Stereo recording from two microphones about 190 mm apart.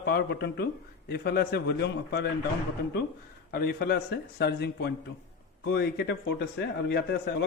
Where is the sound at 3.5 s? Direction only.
55° left (ahead or behind).